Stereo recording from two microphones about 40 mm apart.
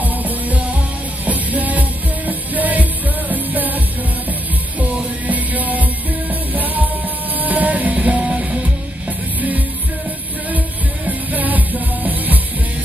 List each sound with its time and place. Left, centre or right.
0.0 s music: right
5.3 s music: right
11.1 s music: right